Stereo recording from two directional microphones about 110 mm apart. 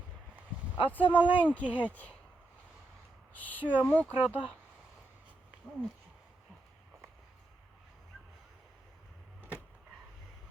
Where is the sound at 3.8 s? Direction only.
15° left (ahead or behind).